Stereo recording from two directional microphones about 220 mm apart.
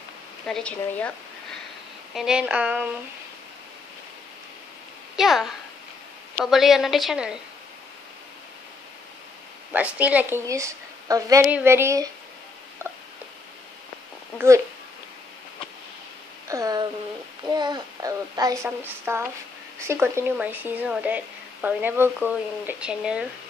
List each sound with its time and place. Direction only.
0.5 s a woman's voice: 5° left (ahead or behind)
5.1 s a woman's voice: centre (ahead or behind)
9.7 s speech: 5° right (ahead or behind)
16.4 s a sound: 15° right (ahead or behind)
17.5 s speech: 20° right (ahead or behind)